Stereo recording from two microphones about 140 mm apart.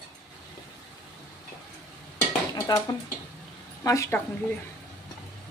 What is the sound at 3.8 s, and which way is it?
Speech, 20° left (ahead or behind).